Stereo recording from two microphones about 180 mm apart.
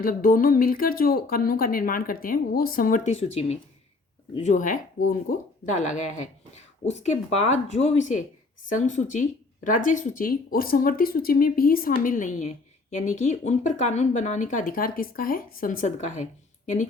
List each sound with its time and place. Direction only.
0.0 s speech: 50° left (ahead or behind)